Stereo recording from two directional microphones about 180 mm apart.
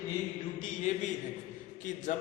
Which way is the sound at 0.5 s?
45° left (ahead or behind).